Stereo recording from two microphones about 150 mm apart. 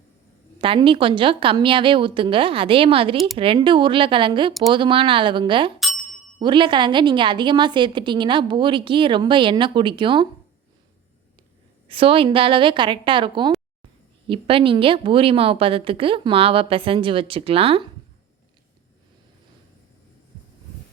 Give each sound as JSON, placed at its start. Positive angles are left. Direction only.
{"t": 0.6, "sound": "a woman's voice", "side_deg": -35}
{"t": 11.9, "sound": "a woman's voice", "side_deg": -35}